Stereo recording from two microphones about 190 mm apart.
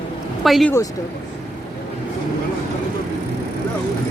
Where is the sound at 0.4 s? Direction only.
Centre (ahead or behind).